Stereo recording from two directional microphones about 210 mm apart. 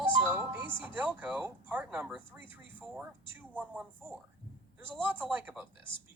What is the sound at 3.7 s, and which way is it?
Speech, 5° right (ahead or behind).